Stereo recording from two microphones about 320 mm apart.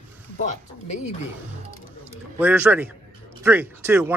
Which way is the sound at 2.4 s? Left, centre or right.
Centre.